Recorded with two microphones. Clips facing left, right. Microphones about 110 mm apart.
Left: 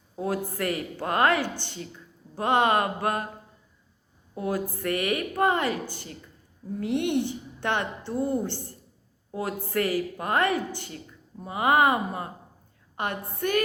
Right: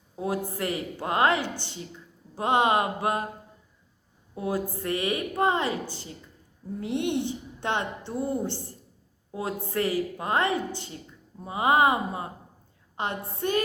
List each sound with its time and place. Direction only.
0.2 s a woman's voice: 20° right (ahead or behind)
4.4 s a woman's voice: 20° right (ahead or behind)